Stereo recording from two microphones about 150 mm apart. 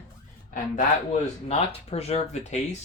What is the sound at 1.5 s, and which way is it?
Speech, 45° left (ahead or behind).